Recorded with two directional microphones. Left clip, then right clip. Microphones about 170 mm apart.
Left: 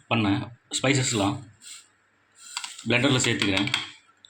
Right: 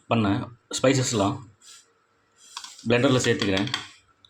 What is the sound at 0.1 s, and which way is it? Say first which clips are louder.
Speech: right 1 dB; 55° right (ahead or behind).